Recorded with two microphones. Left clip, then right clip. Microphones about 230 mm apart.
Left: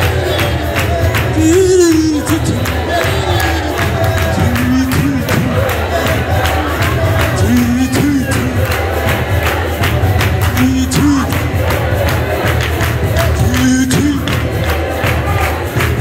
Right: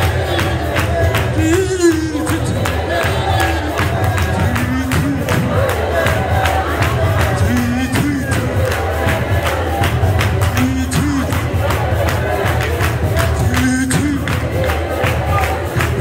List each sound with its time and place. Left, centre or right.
1.4 s music: left